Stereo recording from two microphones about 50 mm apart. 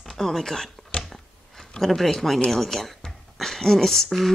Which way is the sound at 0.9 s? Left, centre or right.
Left.